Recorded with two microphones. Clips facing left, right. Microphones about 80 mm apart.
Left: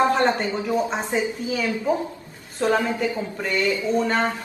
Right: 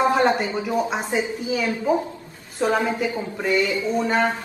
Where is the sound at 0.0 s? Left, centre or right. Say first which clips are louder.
Right 1 dB; centre.